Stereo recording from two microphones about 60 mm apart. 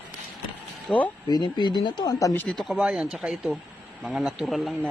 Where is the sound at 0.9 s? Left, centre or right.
Left.